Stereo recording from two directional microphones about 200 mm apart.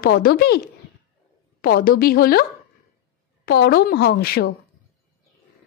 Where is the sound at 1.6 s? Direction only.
50° left (ahead or behind).